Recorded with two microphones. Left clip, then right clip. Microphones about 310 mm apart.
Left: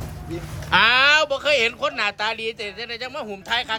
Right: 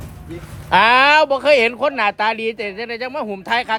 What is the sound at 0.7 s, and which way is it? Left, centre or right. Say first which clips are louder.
Speech: right 4 dB; centre.